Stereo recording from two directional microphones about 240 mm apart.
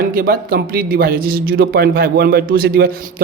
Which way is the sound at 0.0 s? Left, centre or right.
Right.